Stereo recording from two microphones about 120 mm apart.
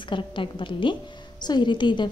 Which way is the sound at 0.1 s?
45° left (ahead or behind).